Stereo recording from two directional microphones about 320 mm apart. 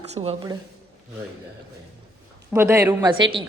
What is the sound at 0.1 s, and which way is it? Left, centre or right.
Speech, centre.